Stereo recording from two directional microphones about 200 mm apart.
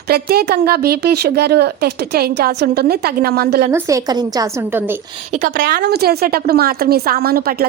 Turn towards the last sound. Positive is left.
turn(degrees=-50)  # may be behind; listen again after turning